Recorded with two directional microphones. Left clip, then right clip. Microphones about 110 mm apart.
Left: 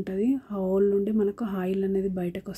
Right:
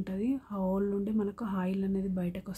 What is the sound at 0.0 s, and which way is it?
Speech, 25° left (ahead or behind).